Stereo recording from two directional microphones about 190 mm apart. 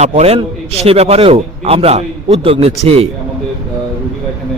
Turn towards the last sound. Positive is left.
turn(degrees=-35)  # may be behind; listen again after turning